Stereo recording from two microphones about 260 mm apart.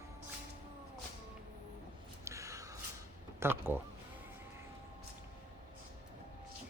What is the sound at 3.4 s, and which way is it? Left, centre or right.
Speech, centre.